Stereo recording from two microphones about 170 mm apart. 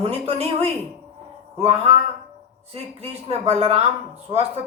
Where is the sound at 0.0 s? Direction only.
35° right (ahead or behind).